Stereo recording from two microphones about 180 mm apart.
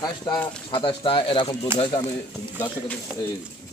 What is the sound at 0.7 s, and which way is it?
Speech, 30° left (ahead or behind).